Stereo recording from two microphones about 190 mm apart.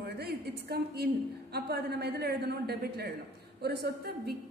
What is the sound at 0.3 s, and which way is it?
A woman's voice, 60° right (ahead or behind).